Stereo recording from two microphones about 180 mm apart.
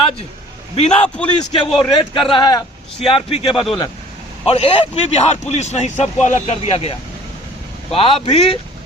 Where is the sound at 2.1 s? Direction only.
25° left (ahead or behind).